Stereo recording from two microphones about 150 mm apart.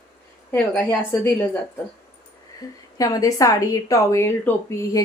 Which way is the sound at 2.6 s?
20° left (ahead or behind).